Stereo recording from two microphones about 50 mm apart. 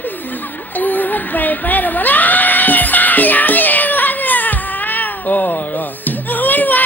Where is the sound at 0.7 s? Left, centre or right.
Left.